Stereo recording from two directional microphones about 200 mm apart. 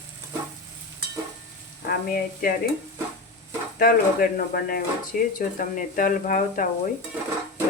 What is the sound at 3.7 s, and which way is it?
Speech, 45° left (ahead or behind).